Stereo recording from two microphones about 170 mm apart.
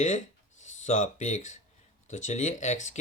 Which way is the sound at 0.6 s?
45° left (ahead or behind).